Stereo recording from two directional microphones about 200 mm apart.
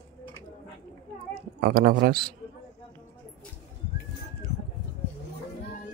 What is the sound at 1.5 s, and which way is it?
Speech, 50° right (ahead or behind).